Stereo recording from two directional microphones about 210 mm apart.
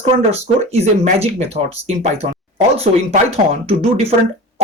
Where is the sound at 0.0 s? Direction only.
30° right (ahead or behind).